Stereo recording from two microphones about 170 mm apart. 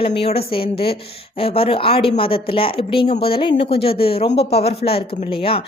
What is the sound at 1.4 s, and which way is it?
A woman's voice, 35° left (ahead or behind).